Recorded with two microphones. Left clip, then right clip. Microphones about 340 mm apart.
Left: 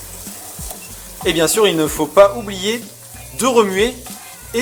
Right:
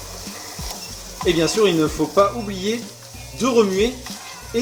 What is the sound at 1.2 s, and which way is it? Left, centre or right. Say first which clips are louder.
Speech: left 3 dB; left.